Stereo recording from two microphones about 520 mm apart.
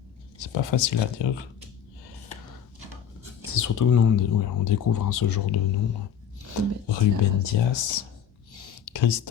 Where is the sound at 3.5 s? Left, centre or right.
Left.